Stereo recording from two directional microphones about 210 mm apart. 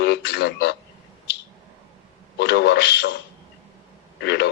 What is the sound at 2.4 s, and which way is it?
Speech, 50° left (ahead or behind).